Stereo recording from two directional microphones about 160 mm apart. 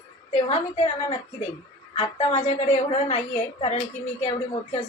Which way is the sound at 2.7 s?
40° left (ahead or behind).